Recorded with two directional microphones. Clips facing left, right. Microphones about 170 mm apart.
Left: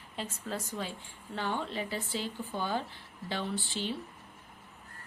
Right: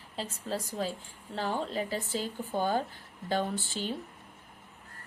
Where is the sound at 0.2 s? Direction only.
35° right (ahead or behind).